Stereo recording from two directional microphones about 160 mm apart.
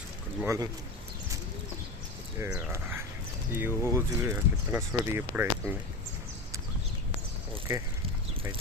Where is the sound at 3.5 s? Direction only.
15° right (ahead or behind).